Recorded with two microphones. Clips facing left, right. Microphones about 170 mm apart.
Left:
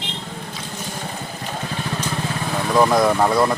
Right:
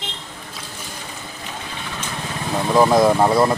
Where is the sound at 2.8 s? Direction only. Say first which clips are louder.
Right 2 dB; 20° right (ahead or behind).